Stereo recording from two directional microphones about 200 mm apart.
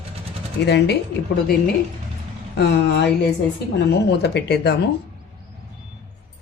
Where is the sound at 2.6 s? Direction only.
55° left (ahead or behind).